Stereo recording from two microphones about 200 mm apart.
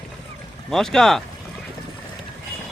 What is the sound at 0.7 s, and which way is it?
Speech, centre (ahead or behind).